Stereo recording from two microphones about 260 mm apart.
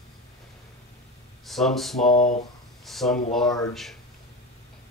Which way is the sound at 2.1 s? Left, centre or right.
Left.